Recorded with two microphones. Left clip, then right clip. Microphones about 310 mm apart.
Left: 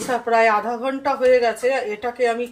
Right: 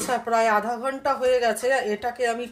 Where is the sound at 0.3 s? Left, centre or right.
Right.